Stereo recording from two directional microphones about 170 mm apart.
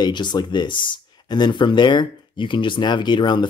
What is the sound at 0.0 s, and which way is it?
Speech, 25° left (ahead or behind).